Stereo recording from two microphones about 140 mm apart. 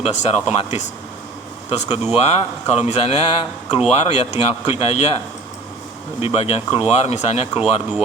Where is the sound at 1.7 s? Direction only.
55° left (ahead or behind).